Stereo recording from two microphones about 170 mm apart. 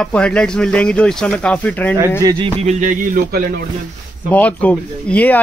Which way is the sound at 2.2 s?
20° right (ahead or behind).